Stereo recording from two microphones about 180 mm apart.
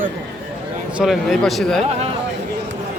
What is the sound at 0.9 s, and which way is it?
Speech, centre (ahead or behind).